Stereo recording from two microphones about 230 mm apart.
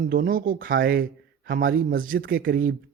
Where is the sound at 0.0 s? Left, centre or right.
Right.